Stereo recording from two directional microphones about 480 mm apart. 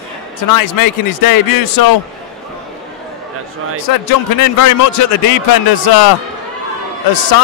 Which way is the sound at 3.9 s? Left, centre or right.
Left.